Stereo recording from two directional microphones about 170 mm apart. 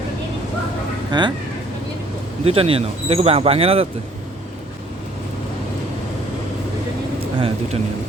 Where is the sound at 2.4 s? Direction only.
35° right (ahead or behind).